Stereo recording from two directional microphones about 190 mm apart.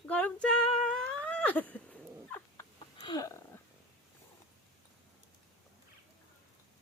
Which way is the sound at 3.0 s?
25° left (ahead or behind).